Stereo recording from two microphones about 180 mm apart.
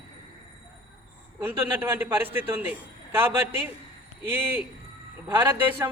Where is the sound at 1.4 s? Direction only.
10° right (ahead or behind).